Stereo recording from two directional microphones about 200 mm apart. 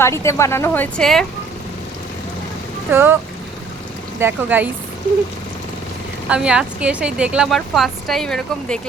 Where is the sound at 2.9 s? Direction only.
10° right (ahead or behind).